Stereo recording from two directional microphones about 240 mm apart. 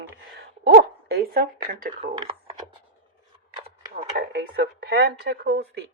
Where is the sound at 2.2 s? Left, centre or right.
Right.